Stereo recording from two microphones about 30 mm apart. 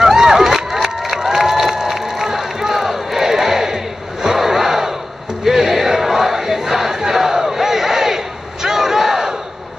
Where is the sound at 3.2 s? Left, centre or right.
Centre.